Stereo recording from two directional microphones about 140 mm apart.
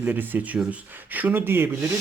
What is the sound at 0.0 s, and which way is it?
Speech, 15° right (ahead or behind).